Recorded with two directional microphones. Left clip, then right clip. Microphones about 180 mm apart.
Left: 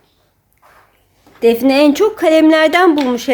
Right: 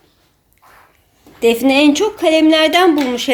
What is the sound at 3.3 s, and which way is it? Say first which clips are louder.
Speech: left 1 dB; 10° left (ahead or behind).